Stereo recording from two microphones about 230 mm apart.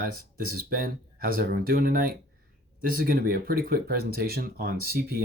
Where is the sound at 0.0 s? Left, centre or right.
Right.